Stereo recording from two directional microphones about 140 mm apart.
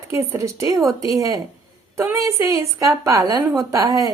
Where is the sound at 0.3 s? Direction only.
20° right (ahead or behind).